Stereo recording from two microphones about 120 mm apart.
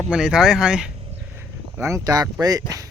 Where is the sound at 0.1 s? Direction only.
5° right (ahead or behind).